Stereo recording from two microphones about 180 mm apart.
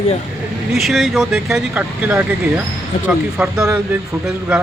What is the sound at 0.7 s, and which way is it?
Speech, centre (ahead or behind).